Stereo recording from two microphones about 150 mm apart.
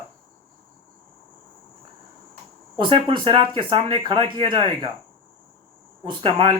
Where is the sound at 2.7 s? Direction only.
35° right (ahead or behind).